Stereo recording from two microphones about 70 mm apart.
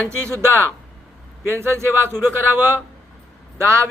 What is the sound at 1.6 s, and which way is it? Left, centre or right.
A man's voice, right.